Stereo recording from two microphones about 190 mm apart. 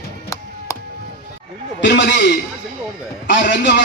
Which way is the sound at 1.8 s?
65° left (ahead or behind).